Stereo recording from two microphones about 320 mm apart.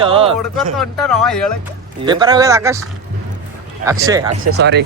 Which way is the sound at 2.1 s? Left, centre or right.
Centre.